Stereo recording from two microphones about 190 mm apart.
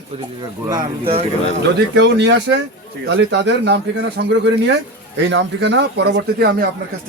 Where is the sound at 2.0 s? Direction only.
65° right (ahead or behind).